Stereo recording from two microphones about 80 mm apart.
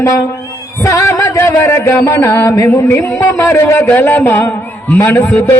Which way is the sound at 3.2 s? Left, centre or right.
Left.